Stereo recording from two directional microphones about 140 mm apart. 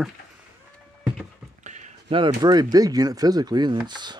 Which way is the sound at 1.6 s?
60° right (ahead or behind).